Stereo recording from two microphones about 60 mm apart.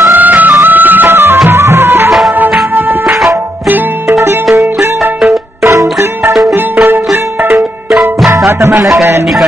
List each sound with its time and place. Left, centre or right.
0.0 s music: right
2.3 s music: right
4.1 s music: right
6.5 s music: right
8.5 s music: right